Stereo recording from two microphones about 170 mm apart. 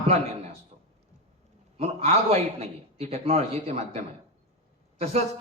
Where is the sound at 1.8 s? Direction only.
35° right (ahead or behind).